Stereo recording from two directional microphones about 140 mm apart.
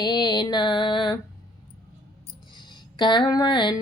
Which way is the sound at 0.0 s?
30° left (ahead or behind).